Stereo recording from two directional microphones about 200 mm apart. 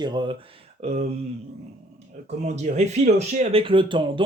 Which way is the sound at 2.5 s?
35° right (ahead or behind).